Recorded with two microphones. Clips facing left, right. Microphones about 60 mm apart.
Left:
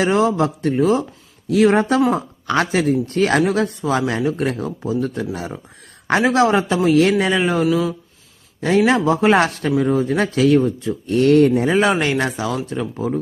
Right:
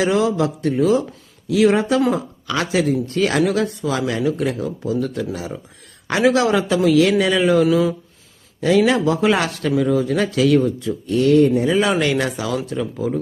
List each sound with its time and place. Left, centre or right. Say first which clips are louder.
0.0 s speech: left 1 dB; left
7.7 s speech: right 2 dB; centre
8.9 s speech: left 2 dB; left
11.0 s speech: left 1 dB; left
11.9 s speech: even; left